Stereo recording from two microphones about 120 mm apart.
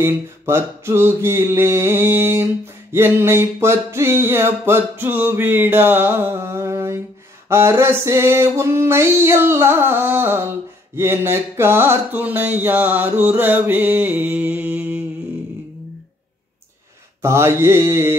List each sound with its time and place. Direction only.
0.0 s mantra: 20° right (ahead or behind)
11.0 s music: 20° right (ahead or behind)
17.2 s mantra: 20° right (ahead or behind)